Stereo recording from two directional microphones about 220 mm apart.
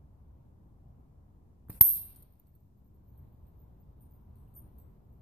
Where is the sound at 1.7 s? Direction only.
10° right (ahead or behind).